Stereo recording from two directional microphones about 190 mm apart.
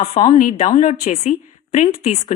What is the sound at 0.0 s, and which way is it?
Speech, 40° left (ahead or behind).